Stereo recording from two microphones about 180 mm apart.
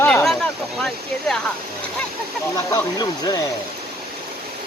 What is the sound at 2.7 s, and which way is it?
Speech, 20° left (ahead or behind).